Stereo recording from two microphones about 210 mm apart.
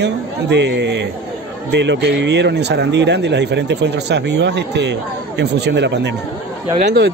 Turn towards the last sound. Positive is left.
turn(degrees=-50)  # may be behind; listen again after turning